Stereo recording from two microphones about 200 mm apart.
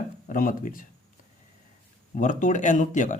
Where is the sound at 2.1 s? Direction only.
40° left (ahead or behind).